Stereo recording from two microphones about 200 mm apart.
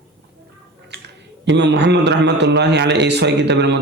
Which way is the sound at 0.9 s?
55° right (ahead or behind).